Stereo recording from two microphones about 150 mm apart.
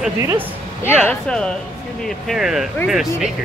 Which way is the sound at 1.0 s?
5° left (ahead or behind).